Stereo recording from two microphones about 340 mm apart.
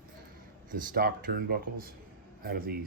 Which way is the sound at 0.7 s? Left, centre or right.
Right.